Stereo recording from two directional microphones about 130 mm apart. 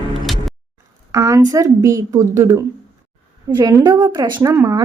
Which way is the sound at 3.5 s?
35° right (ahead or behind).